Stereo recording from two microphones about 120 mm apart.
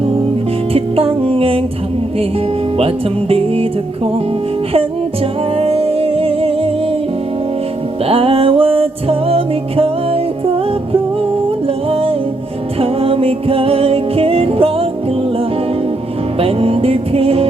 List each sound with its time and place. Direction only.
0.7 s music: 50° right (ahead or behind)
2.7 s speech: 55° right (ahead or behind)
5.5 s music: 55° right (ahead or behind)
8.0 s music: 50° right (ahead or behind)
11.9 s music: 55° right (ahead or behind)
16.4 s music: 55° right (ahead or behind)